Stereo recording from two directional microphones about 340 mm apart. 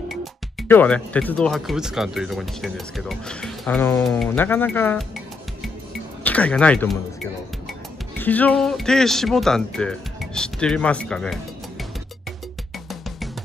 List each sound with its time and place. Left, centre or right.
0.1 s speech: centre
8.2 s speech: centre